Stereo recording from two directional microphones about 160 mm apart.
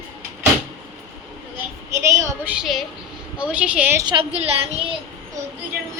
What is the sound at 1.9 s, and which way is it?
A woman's voice, 20° right (ahead or behind).